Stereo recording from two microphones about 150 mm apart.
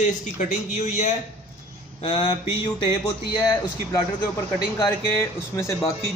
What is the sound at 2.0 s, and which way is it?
Mantra, 40° left (ahead or behind).